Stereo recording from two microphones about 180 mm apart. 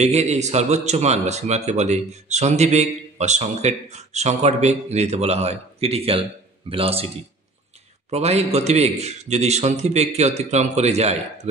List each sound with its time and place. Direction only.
0.0 s a man's voice: 35° right (ahead or behind)
8.1 s a man's voice: 35° right (ahead or behind)